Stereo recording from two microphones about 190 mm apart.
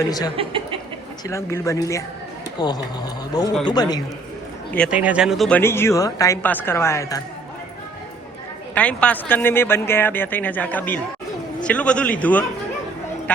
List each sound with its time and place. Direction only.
0.3 s speech: 30° right (ahead or behind)
1.3 s a man's voice: 15° left (ahead or behind)
4.9 s speech: 5° right (ahead or behind); by 7.2 s 15° left (ahead or behind)
8.7 s speech: 5° left (ahead or behind)